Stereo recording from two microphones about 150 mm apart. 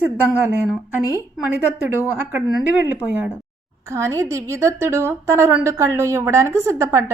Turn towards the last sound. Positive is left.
turn(degrees=-20)  # may be behind; listen again after turning